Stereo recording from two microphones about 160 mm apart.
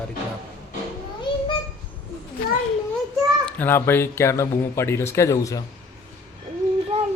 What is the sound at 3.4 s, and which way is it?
Speech, 10° left (ahead or behind).